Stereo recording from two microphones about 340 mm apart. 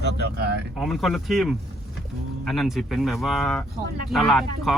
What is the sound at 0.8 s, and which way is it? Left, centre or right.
Speech, centre.